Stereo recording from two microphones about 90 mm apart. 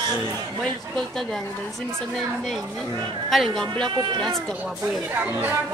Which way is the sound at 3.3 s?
5° left (ahead or behind).